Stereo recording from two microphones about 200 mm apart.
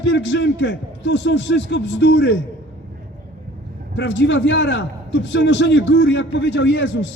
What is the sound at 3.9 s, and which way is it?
A man's voice, 60° left (ahead or behind).